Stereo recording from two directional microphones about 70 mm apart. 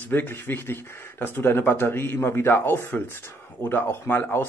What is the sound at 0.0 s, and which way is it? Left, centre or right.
Speech, left.